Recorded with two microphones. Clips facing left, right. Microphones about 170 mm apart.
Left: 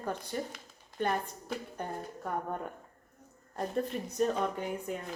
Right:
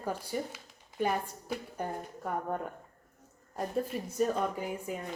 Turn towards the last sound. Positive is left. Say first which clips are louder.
# even
turn(degrees=-5)  # may be behind; listen again after turning